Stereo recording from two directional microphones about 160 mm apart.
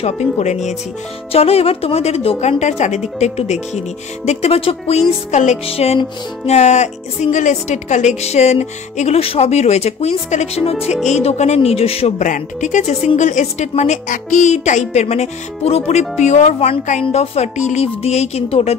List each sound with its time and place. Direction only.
0.0 s music: 45° left (ahead or behind)
1.3 s a woman's voice: 40° left (ahead or behind)
5.3 s music: 45° left (ahead or behind)
11.1 s a woman's voice: 45° left (ahead or behind)
12.3 s music: 50° left (ahead or behind)
17.0 s a woman's voice: 40° left (ahead or behind)